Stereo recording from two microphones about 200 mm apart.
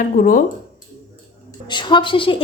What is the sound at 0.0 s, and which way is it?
Speech, 40° left (ahead or behind).